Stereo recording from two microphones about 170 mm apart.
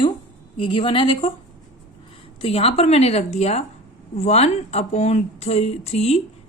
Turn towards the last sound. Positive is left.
turn(degrees=40)  # may be behind; listen again after turning